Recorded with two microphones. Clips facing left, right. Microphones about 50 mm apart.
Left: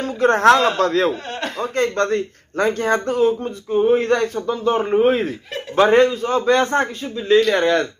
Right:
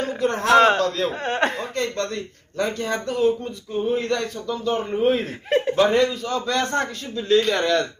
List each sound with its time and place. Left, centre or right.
0.2 s speech: left
1.2 s speech: right
1.6 s speech: left